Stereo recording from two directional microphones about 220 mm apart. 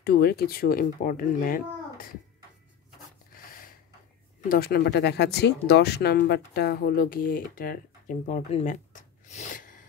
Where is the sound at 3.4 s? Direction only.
40° left (ahead or behind).